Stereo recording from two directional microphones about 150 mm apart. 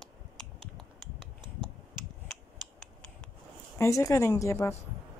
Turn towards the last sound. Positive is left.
turn(degrees=20)  # may be behind; listen again after turning